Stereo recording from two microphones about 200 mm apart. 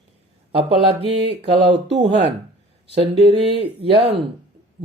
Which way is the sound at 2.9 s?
30° right (ahead or behind).